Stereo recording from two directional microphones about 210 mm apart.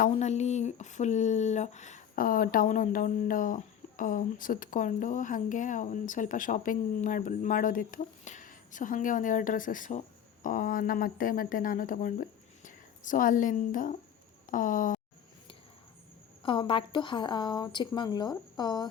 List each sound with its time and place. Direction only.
0.0 s speech: 35° left (ahead or behind)
16.4 s a woman's voice: 25° left (ahead or behind)